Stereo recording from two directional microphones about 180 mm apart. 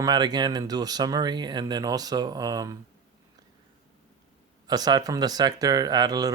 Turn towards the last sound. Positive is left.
turn(degrees=-20)  # may be behind; listen again after turning